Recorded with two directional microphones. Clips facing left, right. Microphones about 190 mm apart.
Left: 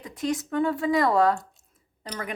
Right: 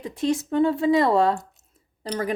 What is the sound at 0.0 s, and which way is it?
Speech, 30° right (ahead or behind).